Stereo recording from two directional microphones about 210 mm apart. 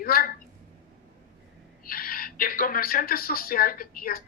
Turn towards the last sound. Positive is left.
turn(degrees=45)  # may be behind; listen again after turning